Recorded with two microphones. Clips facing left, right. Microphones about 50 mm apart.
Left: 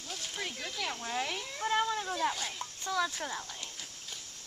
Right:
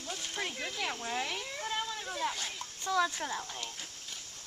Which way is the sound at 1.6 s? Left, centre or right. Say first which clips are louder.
Left 8 dB; centre.